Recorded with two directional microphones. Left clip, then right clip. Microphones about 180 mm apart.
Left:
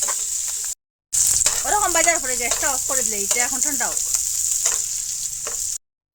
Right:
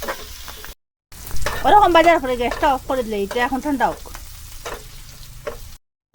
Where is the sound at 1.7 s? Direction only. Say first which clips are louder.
Right 9 dB; 20° right (ahead or behind).